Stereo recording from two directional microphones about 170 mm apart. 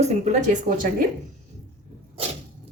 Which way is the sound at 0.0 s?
45° right (ahead or behind).